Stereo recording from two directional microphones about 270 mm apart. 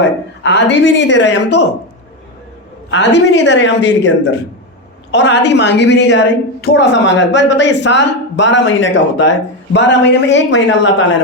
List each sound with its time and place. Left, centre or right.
0.0 s a woman's voice: left
2.9 s a woman's voice: left